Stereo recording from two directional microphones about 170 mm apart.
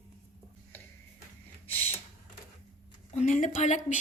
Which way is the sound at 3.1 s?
45° left (ahead or behind).